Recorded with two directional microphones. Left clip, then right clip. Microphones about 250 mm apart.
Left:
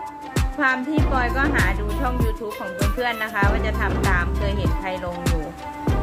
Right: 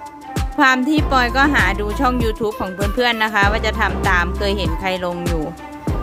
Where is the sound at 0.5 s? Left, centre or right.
Right.